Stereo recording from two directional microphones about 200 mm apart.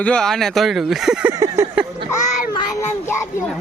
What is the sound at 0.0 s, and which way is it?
Speech, 5° left (ahead or behind).